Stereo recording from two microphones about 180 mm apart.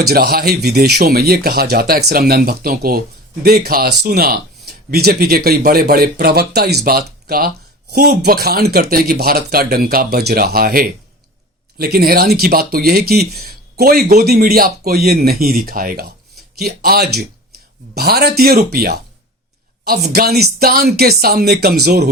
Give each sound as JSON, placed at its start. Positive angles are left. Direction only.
{"t": 0.1, "sound": "speech", "side_deg": -60}